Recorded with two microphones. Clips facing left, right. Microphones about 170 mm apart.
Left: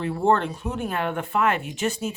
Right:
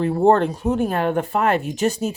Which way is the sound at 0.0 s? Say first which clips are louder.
Right 6 dB; 40° right (ahead or behind).